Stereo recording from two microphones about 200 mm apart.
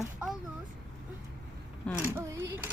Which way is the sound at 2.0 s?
10° right (ahead or behind).